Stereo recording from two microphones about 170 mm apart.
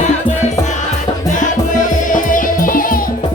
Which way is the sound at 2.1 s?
50° left (ahead or behind).